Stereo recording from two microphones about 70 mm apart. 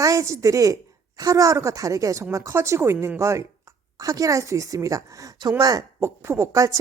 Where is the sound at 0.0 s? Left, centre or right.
Right.